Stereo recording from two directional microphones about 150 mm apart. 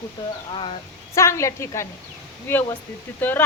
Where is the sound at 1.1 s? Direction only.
20° left (ahead or behind).